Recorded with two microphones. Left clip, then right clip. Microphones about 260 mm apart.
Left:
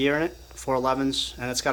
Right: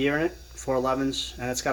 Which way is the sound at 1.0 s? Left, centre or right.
Left.